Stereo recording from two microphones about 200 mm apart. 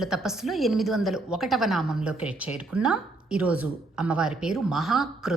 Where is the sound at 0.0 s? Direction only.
Centre (ahead or behind).